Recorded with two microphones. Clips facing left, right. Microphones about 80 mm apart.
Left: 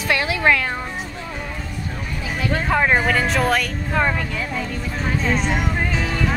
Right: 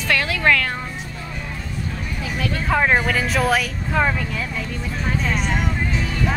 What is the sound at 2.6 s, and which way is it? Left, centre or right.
A woman's voice, centre.